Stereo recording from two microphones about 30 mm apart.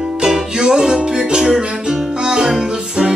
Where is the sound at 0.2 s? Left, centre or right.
Right.